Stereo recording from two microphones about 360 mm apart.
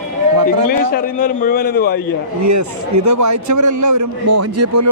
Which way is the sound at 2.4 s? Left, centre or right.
Right.